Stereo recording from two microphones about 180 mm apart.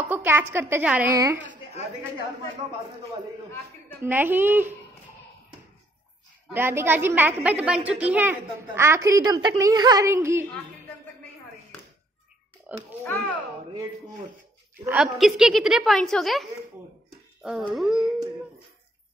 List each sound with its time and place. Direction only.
0.0 s a woman's voice: 10° right (ahead or behind)
4.0 s a woman's voice: 10° right (ahead or behind)
6.5 s a woman's voice: 10° right (ahead or behind)
12.7 s speech: 5° right (ahead or behind)
14.9 s a woman's voice: centre (ahead or behind)